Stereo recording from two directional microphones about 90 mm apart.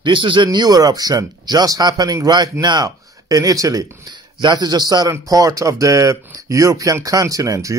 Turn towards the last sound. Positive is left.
turn(degrees=-40)  # may be behind; listen again after turning